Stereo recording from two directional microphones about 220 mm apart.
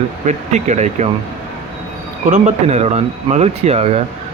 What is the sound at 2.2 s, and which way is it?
Speech, 35° right (ahead or behind).